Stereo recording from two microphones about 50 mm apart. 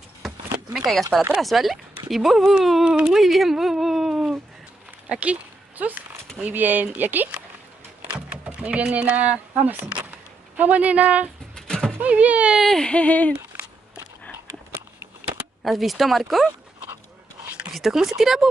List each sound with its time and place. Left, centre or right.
0.7 s speech: centre
5.0 s a sound: right
6.4 s speech: right
8.0 s speech: right
11.5 s a sound: centre
12.0 s speech: right
12.6 s baby cry: centre
12.9 s speech: left
15.6 s speech: centre
17.7 s speech: centre